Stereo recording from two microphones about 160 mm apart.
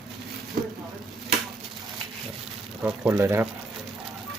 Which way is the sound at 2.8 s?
15° right (ahead or behind).